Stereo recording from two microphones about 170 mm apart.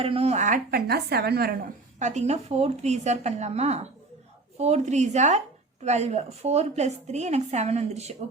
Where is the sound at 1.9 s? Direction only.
45° right (ahead or behind).